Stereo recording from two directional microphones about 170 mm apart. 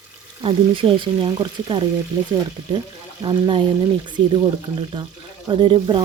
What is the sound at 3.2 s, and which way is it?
Speech, 30° right (ahead or behind).